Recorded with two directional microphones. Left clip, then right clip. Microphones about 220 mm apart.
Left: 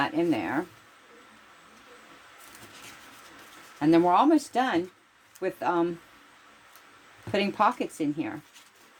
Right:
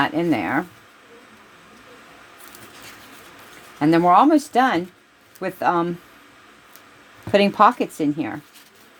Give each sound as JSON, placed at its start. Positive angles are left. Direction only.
{"t": 0.0, "sound": "a woman's voice", "side_deg": -35}
{"t": 3.8, "sound": "a woman's voice", "side_deg": -30}
{"t": 7.3, "sound": "a woman's voice", "side_deg": -35}